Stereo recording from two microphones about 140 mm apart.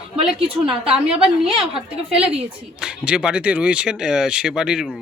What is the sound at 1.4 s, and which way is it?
Speech, 40° right (ahead or behind).